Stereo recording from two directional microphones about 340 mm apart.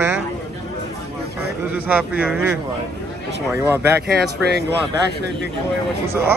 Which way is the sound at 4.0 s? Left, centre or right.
Right.